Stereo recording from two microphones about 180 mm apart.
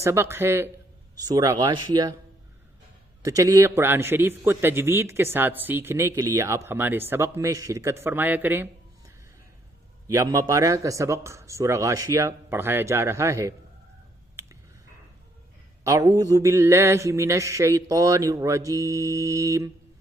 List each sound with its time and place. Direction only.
0.0 s mantra: 15° right (ahead or behind)
1.2 s speech: 20° right (ahead or behind)
3.2 s mantra: 20° right (ahead or behind)
15.8 s mantra: 20° right (ahead or behind)